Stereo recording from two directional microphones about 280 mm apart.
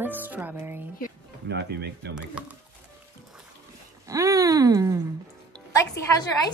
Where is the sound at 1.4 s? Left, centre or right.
Right.